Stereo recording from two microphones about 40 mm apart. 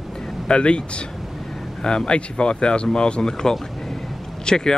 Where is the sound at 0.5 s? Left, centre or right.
Left.